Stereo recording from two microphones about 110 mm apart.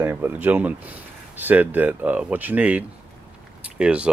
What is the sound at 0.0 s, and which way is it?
Speech, 20° right (ahead or behind).